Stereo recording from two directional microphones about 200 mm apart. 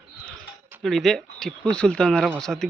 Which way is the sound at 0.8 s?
Centre (ahead or behind).